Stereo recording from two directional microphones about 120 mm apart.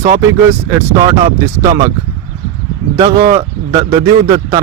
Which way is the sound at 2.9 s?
25° right (ahead or behind).